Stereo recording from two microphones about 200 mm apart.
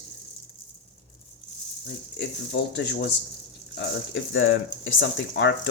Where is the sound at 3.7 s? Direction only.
70° left (ahead or behind).